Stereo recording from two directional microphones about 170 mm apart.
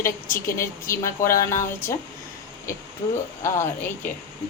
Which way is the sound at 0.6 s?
15° left (ahead or behind).